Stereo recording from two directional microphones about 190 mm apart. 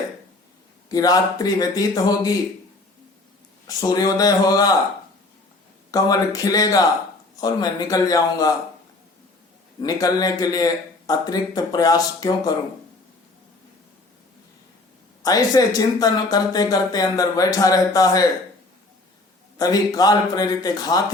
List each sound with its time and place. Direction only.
0.9 s speech: 20° left (ahead or behind)
3.7 s speech: 20° left (ahead or behind)
5.9 s speech: 20° left (ahead or behind)
9.8 s speech: 20° left (ahead or behind)
15.2 s speech: 20° left (ahead or behind)
19.5 s speech: 20° left (ahead or behind)